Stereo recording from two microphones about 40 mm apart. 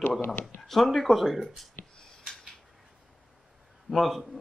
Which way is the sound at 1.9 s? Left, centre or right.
Centre.